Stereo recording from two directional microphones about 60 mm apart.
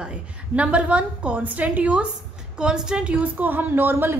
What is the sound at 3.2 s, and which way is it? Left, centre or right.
Speech, right.